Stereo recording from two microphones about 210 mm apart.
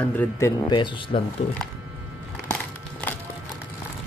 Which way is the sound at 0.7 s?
20° left (ahead or behind).